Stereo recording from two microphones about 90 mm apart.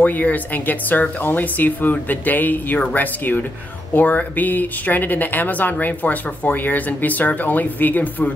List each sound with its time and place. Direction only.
0.0 s speech: 20° left (ahead or behind)